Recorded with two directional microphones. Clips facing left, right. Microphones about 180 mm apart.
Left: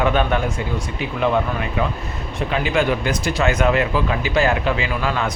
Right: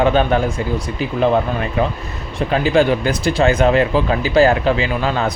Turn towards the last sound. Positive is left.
turn(degrees=-35)  # may be behind; listen again after turning